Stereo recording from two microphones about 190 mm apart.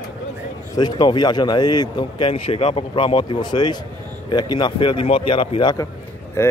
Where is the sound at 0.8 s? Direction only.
20° left (ahead or behind).